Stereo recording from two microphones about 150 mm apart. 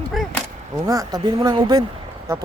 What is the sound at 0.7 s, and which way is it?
Speech, 25° right (ahead or behind).